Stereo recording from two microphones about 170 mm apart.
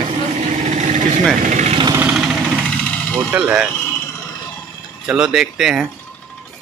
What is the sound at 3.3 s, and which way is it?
Speech, 5° right (ahead or behind).